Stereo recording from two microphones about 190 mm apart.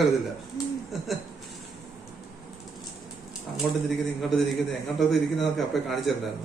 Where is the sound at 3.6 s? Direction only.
5° left (ahead or behind).